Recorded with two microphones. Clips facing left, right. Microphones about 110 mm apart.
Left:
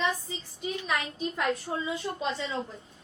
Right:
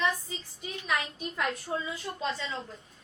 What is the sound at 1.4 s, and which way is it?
A woman's voice, 20° left (ahead or behind).